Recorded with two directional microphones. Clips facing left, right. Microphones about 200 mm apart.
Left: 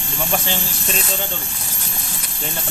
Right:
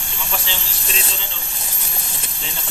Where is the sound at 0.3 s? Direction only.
50° left (ahead or behind).